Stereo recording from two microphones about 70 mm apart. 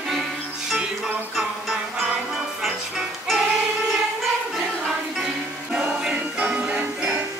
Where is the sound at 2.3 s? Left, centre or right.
Centre.